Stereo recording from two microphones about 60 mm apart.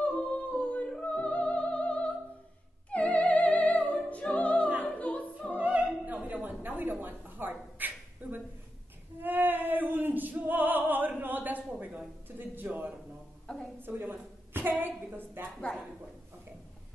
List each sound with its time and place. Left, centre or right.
0.0 s music: left
2.9 s opera: left
5.6 s opera: right
12.4 s a sound: right